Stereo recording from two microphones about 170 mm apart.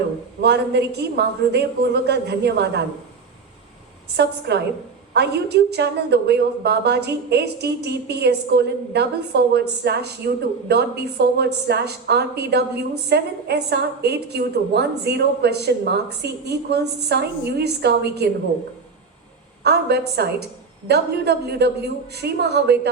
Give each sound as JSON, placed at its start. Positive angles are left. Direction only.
{"t": 0.4, "sound": "speech", "side_deg": -80}
{"t": 4.2, "sound": "a woman's voice", "side_deg": -80}
{"t": 19.6, "sound": "speech", "side_deg": -75}